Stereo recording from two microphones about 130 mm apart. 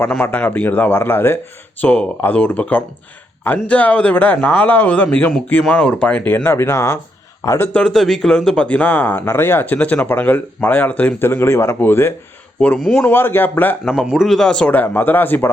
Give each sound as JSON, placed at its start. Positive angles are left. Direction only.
{"t": 0.1, "sound": "a man's voice", "side_deg": 10}
{"t": 7.7, "sound": "speech", "side_deg": 5}
{"t": 13.9, "sound": "speech", "side_deg": -5}